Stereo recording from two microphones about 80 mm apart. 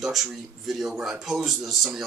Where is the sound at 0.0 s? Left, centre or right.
Centre.